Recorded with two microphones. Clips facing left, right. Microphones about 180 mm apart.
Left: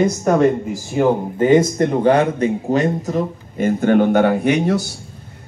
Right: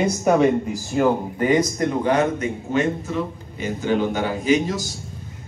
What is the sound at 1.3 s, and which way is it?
A man's voice, 25° left (ahead or behind).